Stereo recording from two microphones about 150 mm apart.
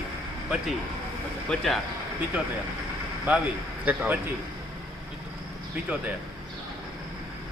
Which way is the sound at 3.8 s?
10° right (ahead or behind).